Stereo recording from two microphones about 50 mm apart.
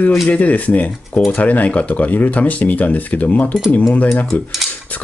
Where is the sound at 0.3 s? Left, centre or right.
Left.